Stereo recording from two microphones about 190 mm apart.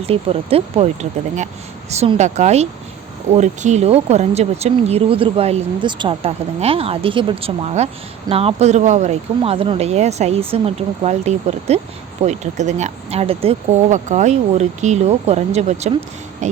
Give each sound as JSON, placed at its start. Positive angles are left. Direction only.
{"t": 0.0, "sound": "speech", "side_deg": -30}
{"t": 2.0, "sound": "speech", "side_deg": -35}